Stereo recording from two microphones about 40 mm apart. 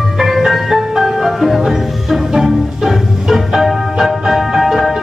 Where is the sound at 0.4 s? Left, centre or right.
Centre.